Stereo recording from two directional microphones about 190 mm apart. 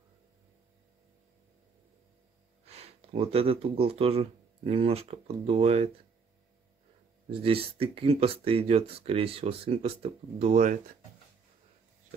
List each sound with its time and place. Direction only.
2.6 s speech: 35° right (ahead or behind)
7.2 s speech: 30° right (ahead or behind)